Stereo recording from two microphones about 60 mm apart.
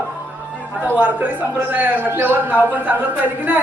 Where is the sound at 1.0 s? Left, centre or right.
Right.